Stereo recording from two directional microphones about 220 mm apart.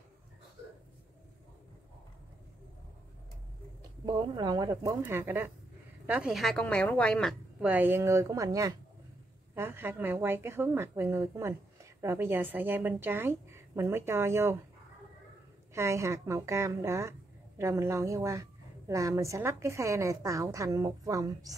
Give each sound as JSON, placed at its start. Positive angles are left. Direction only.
{"t": 4.0, "sound": "a woman's voice", "side_deg": -20}
{"t": 15.7, "sound": "a woman's voice", "side_deg": -10}